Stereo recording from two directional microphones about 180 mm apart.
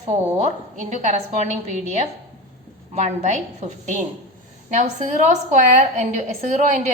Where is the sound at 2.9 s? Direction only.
40° right (ahead or behind).